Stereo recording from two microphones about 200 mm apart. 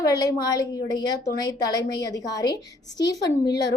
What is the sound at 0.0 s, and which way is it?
A woman's voice, 20° left (ahead or behind).